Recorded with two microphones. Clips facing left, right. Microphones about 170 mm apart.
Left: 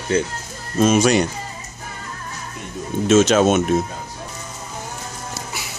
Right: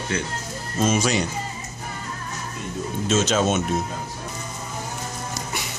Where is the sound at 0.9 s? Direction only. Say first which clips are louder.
Left 6 dB; 60° left (ahead or behind).